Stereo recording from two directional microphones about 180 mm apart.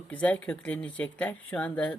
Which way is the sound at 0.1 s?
10° left (ahead or behind).